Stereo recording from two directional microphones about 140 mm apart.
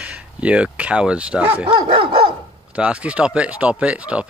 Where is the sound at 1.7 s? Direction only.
40° right (ahead or behind).